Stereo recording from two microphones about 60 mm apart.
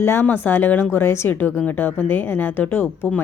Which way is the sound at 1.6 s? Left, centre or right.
Left.